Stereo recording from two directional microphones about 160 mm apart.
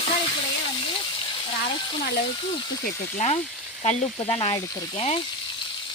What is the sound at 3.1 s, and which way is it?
Speech, 40° left (ahead or behind).